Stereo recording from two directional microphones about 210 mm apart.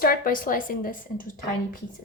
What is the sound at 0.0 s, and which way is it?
Speech, 45° left (ahead or behind).